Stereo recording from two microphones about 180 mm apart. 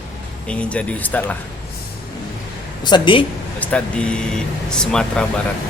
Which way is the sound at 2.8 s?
25° left (ahead or behind).